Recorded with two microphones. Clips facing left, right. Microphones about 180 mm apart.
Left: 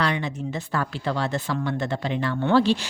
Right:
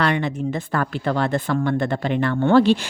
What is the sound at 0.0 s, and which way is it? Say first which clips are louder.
Speech: right 5 dB; 60° right (ahead or behind).